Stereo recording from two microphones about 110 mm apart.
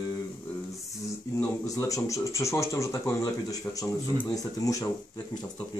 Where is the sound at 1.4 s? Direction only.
30° left (ahead or behind).